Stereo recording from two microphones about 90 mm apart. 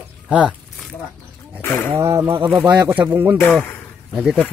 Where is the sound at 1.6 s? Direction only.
25° left (ahead or behind).